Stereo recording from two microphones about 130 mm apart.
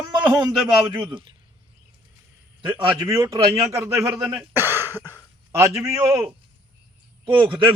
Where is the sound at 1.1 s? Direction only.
35° right (ahead or behind).